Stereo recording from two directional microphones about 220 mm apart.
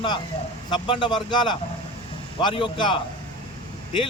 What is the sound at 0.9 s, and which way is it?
A man's voice, 20° left (ahead or behind).